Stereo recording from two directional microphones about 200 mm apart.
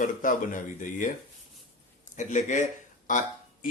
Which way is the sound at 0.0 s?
40° left (ahead or behind).